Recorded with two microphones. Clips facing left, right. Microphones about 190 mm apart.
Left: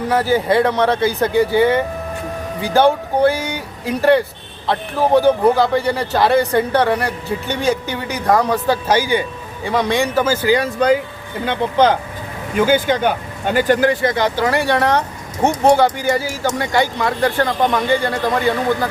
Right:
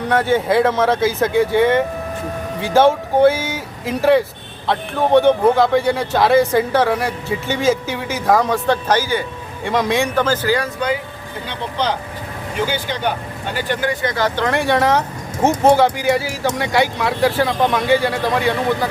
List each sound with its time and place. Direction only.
0.1 s speech: centre (ahead or behind)
9.6 s speech: centre (ahead or behind); by 10.7 s 15° left (ahead or behind)
11.4 s speech: 50° left (ahead or behind)
14.0 s speech: 25° left (ahead or behind)
14.3 s speech: 5° left (ahead or behind)